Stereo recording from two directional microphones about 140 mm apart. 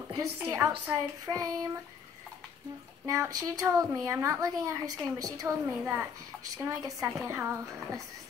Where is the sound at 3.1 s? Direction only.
25° right (ahead or behind).